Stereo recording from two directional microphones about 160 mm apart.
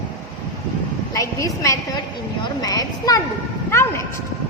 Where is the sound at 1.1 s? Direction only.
20° left (ahead or behind).